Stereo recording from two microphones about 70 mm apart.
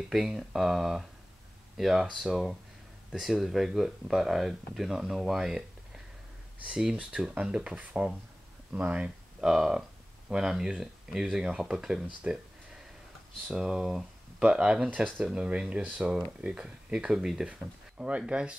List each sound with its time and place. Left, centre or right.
0.1 s speech: centre
6.6 s speech: centre
12.2 s speech: centre
13.5 s speech: centre